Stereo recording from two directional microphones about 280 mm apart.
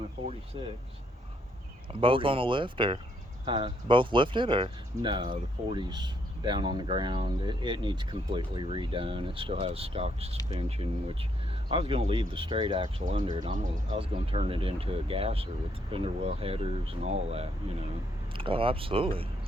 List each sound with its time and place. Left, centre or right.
0.2 s speech: right
1.9 s speech: centre